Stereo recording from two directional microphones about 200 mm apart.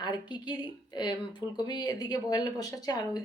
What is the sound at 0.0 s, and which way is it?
A woman's voice, 20° left (ahead or behind).